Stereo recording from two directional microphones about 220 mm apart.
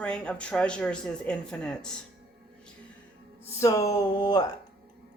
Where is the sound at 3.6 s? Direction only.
15° left (ahead or behind).